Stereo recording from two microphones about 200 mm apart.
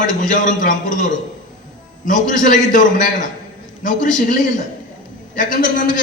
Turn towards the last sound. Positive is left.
turn(degrees=40)  # may be behind; listen again after turning